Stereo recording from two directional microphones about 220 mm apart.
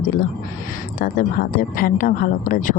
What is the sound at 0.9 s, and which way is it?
Speech, 40° left (ahead or behind).